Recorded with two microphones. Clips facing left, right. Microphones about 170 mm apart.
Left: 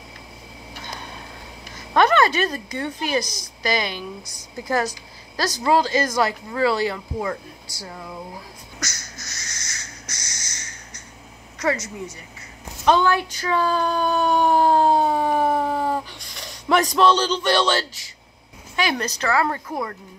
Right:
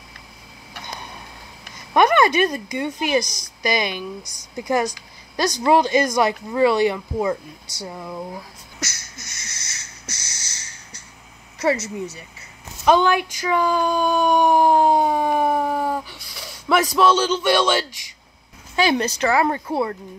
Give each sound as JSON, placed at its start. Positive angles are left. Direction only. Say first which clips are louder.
{"t": 2.0, "sound": "a woman's voice", "louder": "right 2 dB", "side_deg": -15}
{"t": 8.7, "sound": "a sound", "louder": "right 2 dB", "side_deg": -25}
{"t": 11.6, "sound": "speech", "louder": "right 3 dB", "side_deg": -25}
{"t": 12.8, "sound": "speech", "louder": "right 2 dB", "side_deg": -15}
{"t": 18.8, "sound": "speech", "louder": "right 5 dB", "side_deg": -30}